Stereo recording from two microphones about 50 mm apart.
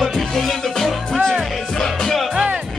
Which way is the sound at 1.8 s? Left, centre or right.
Centre.